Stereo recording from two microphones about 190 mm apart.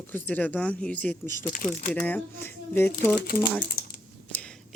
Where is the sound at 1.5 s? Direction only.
45° left (ahead or behind).